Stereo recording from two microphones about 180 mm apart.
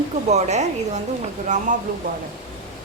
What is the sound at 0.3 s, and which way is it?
Speech, 40° right (ahead or behind).